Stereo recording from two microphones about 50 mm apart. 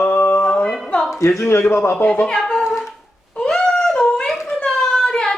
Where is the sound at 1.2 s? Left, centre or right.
Left.